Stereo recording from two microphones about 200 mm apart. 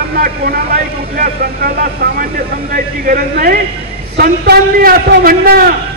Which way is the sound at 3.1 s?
50° right (ahead or behind).